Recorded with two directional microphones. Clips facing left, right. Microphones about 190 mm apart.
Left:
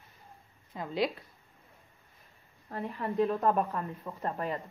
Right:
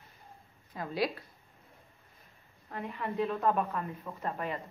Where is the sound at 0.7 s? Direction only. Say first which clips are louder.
Left 1 dB; 20° left (ahead or behind).